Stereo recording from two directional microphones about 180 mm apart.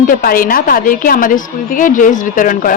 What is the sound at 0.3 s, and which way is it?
A woman's voice, 55° left (ahead or behind).